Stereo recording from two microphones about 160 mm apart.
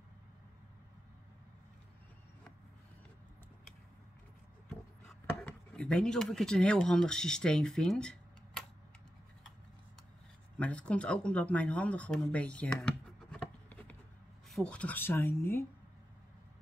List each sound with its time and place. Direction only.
5.0 s chopping: 5° left (ahead or behind)
10.6 s speech: 10° left (ahead or behind)